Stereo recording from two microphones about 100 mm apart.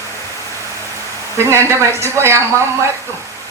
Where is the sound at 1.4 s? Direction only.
25° right (ahead or behind).